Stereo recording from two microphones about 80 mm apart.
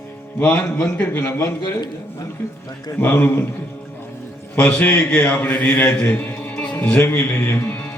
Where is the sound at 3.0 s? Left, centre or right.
Left.